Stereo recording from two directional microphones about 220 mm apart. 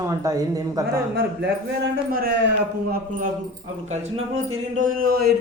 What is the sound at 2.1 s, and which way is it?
Speech, 45° right (ahead or behind).